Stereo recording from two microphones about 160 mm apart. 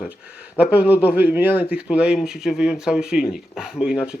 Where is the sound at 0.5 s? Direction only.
10° right (ahead or behind).